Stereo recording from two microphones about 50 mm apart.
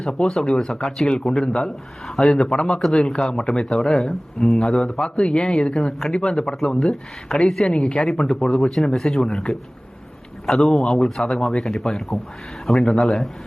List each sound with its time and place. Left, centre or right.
0.0 s speech: centre
4.6 s speech: centre
7.8 s speech: left
8.0 s speech: centre